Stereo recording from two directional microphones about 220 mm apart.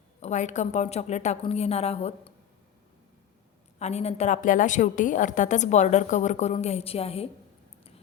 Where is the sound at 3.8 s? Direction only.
30° left (ahead or behind).